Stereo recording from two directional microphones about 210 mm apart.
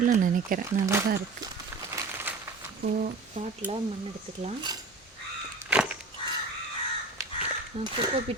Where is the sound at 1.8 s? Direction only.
10° right (ahead or behind).